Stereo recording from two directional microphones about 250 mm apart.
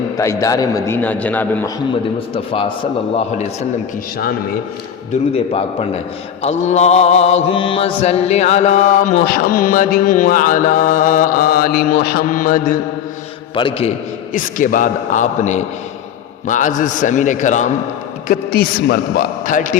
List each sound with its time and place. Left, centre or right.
0.2 s a man's voice: centre
2.3 s a man's voice: left
5.5 s a man's voice: left
6.4 s mantra: left
13.6 s a man's voice: left
14.3 s mantra: left
16.5 s a man's voice: left
18.3 s mantra: left